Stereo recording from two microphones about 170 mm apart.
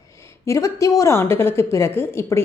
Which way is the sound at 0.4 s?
15° left (ahead or behind).